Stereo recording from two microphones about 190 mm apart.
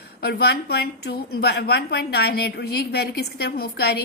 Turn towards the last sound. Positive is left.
turn(degrees=55)  # may be behind; listen again after turning